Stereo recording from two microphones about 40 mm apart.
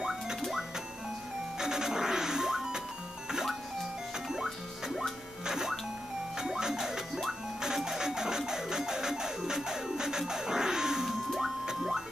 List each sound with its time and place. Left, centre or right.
0.0 s music: centre
1.6 s music: centre
4.3 s music: centre
11.2 s music: centre
11.6 s a sound: centre